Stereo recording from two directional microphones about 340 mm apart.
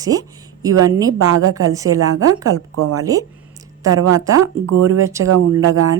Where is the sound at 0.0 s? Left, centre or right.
Centre.